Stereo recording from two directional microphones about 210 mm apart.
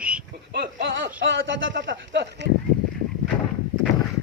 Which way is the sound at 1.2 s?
65° right (ahead or behind).